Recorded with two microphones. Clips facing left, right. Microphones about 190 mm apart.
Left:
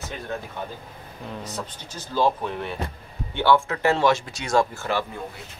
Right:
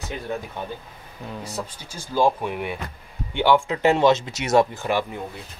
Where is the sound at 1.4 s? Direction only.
10° right (ahead or behind).